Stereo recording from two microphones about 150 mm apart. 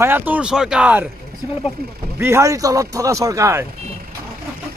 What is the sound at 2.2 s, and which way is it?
Speech, 20° right (ahead or behind).